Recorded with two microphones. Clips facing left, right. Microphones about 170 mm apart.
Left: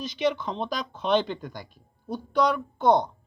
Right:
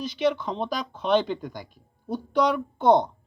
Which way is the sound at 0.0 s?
5° right (ahead or behind).